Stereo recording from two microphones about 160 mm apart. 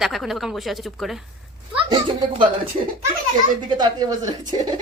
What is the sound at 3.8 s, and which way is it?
Speech, 25° right (ahead or behind).